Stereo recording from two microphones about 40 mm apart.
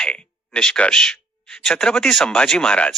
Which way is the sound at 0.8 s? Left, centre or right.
Centre.